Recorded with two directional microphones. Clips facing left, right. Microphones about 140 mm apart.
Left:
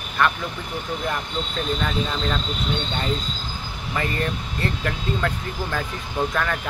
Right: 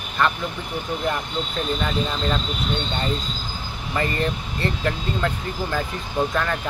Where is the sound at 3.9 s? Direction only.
Centre (ahead or behind).